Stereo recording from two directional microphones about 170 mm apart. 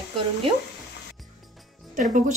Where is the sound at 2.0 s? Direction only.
50° right (ahead or behind).